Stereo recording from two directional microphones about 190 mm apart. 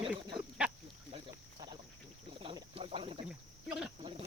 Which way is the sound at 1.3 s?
20° right (ahead or behind).